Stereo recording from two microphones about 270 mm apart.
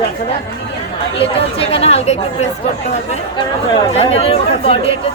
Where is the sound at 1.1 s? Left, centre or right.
Left.